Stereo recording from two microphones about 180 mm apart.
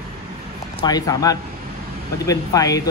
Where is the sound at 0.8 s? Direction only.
20° left (ahead or behind).